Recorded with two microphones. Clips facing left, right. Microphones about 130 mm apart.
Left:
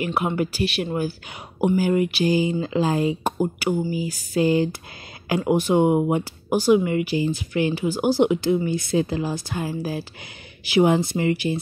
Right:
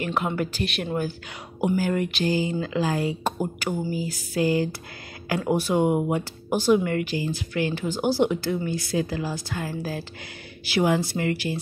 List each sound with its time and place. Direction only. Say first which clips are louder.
0.0 s speech: left 3 dB; 10° left (ahead or behind)